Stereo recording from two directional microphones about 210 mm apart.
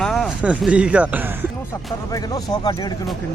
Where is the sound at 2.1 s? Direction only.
15° left (ahead or behind).